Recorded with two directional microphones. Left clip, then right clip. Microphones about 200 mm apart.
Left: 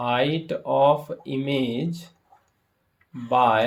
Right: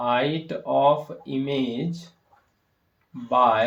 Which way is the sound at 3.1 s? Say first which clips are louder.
Even; 40° left (ahead or behind).